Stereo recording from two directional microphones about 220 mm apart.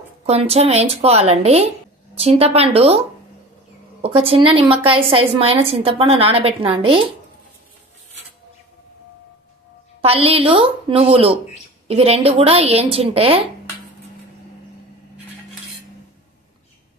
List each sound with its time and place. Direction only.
0.3 s a woman's voice: 30° right (ahead or behind)
4.0 s a woman's voice: 25° right (ahead or behind)
10.0 s a woman's voice: 25° right (ahead or behind)